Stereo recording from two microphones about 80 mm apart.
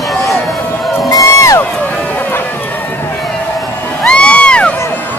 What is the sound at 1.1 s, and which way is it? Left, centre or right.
Crowd, left.